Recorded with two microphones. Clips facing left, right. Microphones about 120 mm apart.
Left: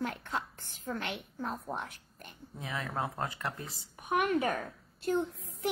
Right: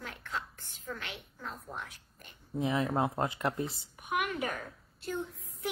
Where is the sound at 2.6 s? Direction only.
25° right (ahead or behind).